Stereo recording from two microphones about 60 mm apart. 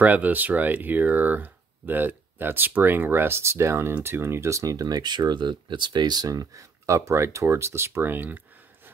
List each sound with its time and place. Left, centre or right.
0.0 s speech: right
6.2 s speech: right
7.0 s speech: right